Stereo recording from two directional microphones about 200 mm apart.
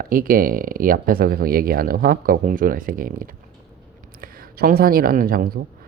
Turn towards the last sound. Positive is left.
turn(degrees=-45)  # may be behind; listen again after turning